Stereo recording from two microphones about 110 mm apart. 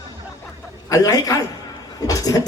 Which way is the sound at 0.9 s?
35° left (ahead or behind).